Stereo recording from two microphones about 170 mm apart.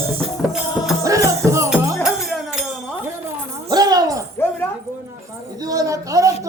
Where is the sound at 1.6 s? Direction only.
Centre (ahead or behind).